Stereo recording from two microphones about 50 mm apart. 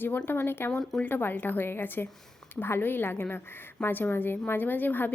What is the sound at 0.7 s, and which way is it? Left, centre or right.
Speech, centre.